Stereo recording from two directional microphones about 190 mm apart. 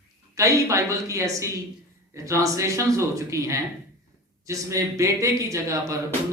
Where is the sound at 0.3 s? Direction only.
15° right (ahead or behind).